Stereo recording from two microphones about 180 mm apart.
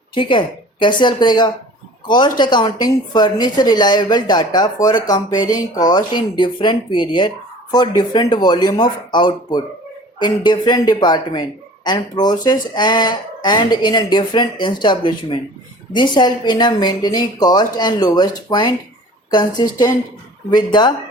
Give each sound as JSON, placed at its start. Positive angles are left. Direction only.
{"t": 0.1, "sound": "a woman's voice", "side_deg": 25}